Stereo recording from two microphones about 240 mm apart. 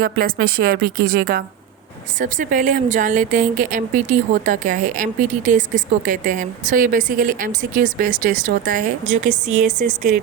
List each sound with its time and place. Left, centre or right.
0.0 s a woman's voice: right